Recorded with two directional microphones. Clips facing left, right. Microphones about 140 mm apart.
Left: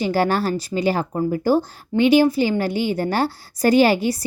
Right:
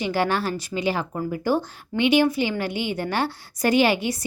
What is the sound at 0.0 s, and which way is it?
Speech, 40° left (ahead or behind).